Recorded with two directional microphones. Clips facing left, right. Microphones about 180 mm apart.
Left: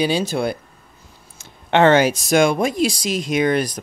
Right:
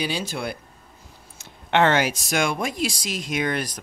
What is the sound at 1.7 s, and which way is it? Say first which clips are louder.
Speech: left 6 dB; 30° left (ahead or behind).